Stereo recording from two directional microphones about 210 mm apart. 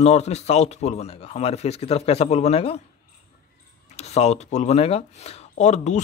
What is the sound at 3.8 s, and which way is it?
Speech, 30° left (ahead or behind).